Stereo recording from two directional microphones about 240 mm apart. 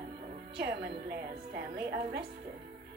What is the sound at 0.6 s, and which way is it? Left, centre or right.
A woman's voice, right.